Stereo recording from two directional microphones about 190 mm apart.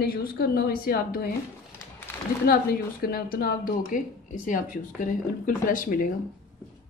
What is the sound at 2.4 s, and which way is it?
A woman's voice, 50° left (ahead or behind).